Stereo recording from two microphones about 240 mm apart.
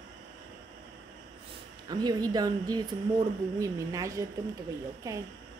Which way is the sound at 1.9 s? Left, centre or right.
Centre.